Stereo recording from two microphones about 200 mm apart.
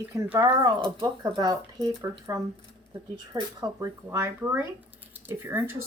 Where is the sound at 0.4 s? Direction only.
25° right (ahead or behind).